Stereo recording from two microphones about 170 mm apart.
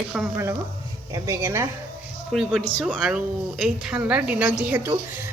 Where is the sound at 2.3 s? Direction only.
Centre (ahead or behind).